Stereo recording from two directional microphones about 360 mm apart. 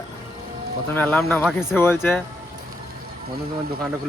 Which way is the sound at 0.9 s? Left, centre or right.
Centre.